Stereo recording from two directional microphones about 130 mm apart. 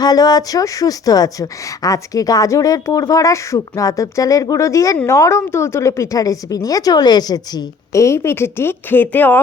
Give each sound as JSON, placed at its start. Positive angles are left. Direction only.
{"t": 0.0, "sound": "a woman's voice", "side_deg": 30}